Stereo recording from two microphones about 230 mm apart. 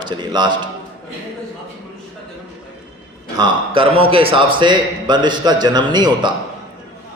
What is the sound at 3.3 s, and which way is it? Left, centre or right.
A man's voice, right.